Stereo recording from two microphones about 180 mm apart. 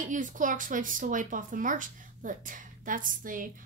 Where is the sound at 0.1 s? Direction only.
45° right (ahead or behind).